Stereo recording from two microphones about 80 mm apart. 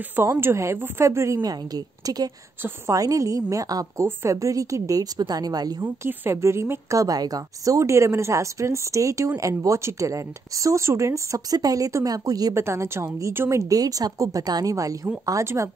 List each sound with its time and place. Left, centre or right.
0.4 s a woman's voice: right
1.4 s a woman's voice: right
6.0 s a woman's voice: right
12.5 s a woman's voice: right
13.6 s a woman's voice: right